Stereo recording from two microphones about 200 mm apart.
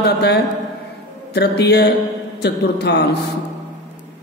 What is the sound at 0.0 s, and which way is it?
A man's voice, 55° left (ahead or behind).